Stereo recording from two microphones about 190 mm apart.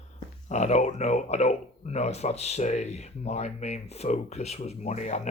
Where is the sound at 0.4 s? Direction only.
35° left (ahead or behind).